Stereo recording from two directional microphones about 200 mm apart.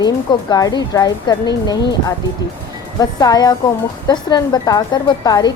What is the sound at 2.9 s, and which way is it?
A woman's voice, 20° left (ahead or behind).